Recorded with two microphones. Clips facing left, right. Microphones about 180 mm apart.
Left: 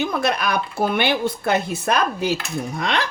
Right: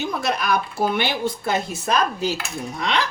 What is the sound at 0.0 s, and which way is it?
Speech, 65° left (ahead or behind).